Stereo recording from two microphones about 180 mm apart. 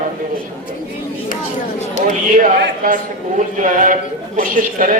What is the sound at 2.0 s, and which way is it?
Speech, 45° right (ahead or behind).